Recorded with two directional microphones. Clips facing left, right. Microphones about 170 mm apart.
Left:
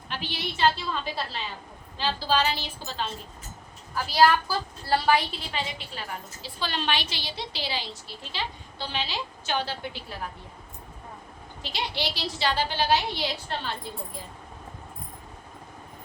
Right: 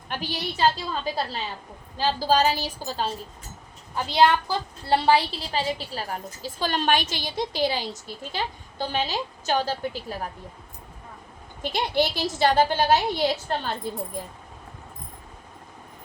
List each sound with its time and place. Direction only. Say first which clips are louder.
0.1 s a woman's voice: right 3 dB; 40° right (ahead or behind)
3.9 s a woman's voice: right 1 dB; 20° right (ahead or behind); by 10.2 s 40° right (ahead or behind)
11.6 s a woman's voice: right 8 dB; 50° right (ahead or behind)